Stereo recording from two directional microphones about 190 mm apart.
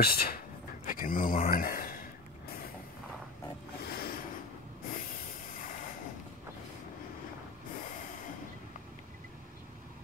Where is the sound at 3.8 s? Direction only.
50° left (ahead or behind).